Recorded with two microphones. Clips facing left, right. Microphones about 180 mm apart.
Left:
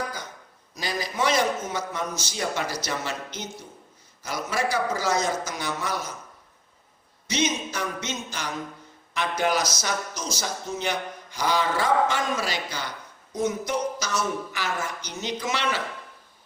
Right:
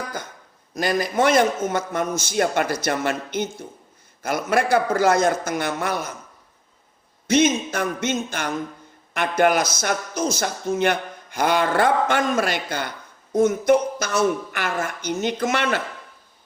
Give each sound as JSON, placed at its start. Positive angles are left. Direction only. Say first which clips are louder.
{"t": 0.7, "sound": "speech", "louder": "right 8 dB", "side_deg": -55}
{"t": 7.3, "sound": "a sound", "louder": "right 8 dB", "side_deg": -50}
{"t": 9.1, "sound": "speech", "louder": "right 6 dB", "side_deg": -55}